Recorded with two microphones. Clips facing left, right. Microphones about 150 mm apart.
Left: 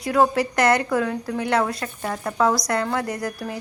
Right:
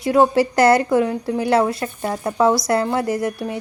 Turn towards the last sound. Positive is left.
turn(degrees=-25)  # may be behind; listen again after turning